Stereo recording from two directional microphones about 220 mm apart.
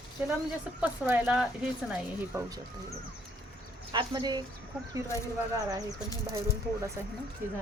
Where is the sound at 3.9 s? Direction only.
20° right (ahead or behind).